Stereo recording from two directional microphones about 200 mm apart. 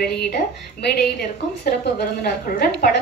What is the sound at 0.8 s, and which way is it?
A woman's voice, 50° left (ahead or behind).